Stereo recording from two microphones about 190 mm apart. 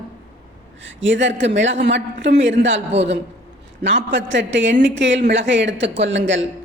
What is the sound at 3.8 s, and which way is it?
Speech, 70° right (ahead or behind).